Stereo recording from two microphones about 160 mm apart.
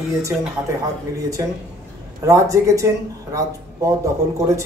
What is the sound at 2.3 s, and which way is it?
Speech, 20° right (ahead or behind).